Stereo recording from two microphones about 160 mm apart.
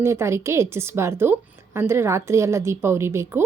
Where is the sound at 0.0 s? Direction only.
15° right (ahead or behind).